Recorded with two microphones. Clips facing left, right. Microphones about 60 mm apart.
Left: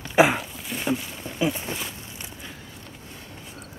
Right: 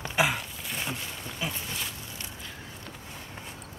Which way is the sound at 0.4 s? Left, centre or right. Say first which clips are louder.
Left 3 dB; centre.